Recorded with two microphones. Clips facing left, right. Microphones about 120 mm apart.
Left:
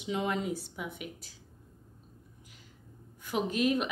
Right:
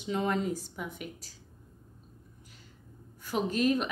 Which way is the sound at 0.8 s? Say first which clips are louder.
Even; 40° right (ahead or behind).